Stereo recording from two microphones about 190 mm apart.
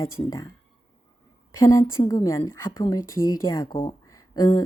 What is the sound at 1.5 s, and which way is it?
A woman's voice, 15° left (ahead or behind).